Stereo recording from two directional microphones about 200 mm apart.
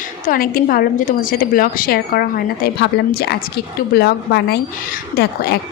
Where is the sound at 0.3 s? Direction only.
45° left (ahead or behind).